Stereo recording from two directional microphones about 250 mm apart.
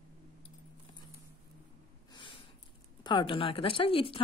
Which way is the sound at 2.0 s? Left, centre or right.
Centre.